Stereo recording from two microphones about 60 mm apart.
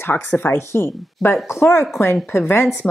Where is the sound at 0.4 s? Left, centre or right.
Left.